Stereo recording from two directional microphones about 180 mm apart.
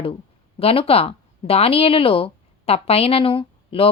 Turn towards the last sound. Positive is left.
turn(degrees=30)  # may be behind; listen again after turning